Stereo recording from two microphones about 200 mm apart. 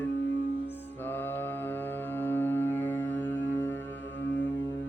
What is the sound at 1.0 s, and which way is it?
Mantra, 10° left (ahead or behind).